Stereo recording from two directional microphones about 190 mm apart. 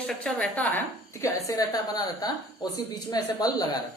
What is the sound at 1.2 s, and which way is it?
A woman's voice, 20° left (ahead or behind).